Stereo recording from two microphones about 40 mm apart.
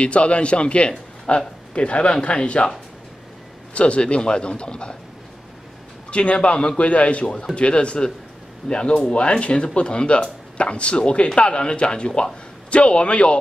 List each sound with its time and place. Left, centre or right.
0.0 s a man's voice: left
3.7 s speech: left
6.0 s a man's voice: left
12.1 s speech: centre
12.6 s speech: left